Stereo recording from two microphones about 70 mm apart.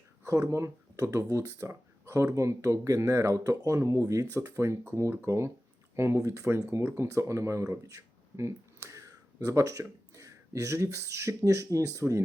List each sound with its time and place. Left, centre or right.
0.3 s speech: right